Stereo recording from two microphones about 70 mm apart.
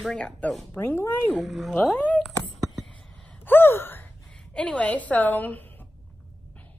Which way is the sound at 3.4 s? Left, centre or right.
Left.